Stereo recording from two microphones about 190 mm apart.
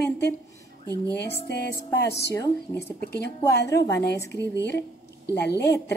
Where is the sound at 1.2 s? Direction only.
60° left (ahead or behind).